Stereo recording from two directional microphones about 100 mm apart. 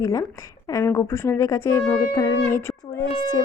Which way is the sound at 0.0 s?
35° left (ahead or behind).